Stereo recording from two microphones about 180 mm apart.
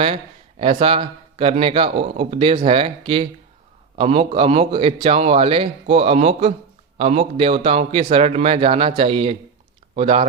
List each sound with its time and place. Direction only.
0.6 s a man's voice: 30° right (ahead or behind)